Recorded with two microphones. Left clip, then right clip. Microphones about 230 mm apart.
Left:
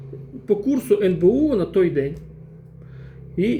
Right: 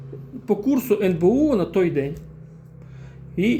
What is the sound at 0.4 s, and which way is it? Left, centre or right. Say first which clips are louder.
Speech: left 1 dB; centre.